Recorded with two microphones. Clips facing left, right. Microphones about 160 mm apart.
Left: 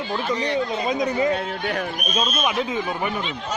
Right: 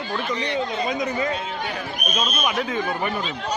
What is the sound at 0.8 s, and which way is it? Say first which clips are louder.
Speech: left 3 dB; 30° left (ahead or behind).